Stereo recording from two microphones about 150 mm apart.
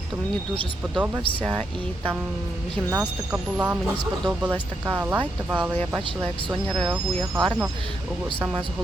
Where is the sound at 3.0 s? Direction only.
10° right (ahead or behind).